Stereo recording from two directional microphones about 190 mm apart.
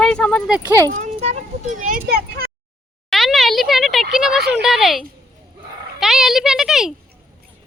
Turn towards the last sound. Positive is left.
turn(degrees=0)  # may be behind; listen again after turning